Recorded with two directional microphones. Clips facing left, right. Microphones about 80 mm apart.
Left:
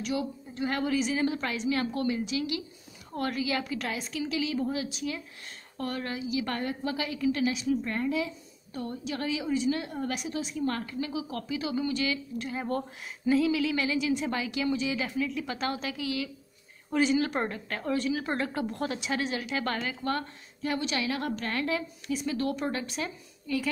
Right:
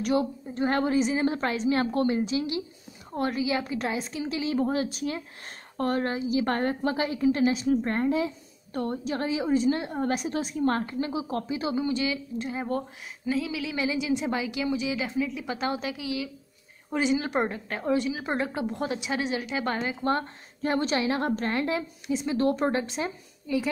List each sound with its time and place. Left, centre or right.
0.0 s a woman's voice: right
4.6 s a woman's voice: right
8.7 s a woman's voice: right
9.1 s a woman's voice: right
10.3 s a woman's voice: right
11.7 s a woman's voice: centre